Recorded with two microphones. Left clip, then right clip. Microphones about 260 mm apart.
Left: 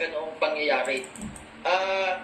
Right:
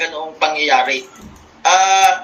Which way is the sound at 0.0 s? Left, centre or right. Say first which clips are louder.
Right 9 dB; right.